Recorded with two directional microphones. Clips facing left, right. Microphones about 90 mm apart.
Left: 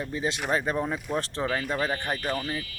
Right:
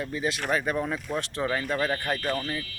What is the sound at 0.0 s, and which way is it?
Speech, 25° left (ahead or behind).